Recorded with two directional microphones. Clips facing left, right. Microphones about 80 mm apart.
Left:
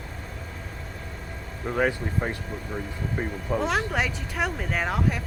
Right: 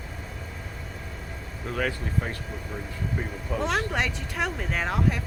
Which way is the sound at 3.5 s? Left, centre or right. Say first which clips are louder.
Left 1 dB; centre.